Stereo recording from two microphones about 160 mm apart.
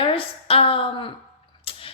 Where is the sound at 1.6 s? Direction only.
35° left (ahead or behind).